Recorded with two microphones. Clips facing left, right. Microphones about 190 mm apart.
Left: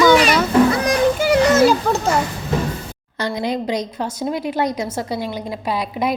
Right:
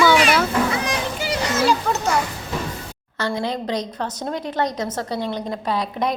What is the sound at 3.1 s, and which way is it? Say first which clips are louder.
A woman's voice: left 2 dB; 15° left (ahead or behind).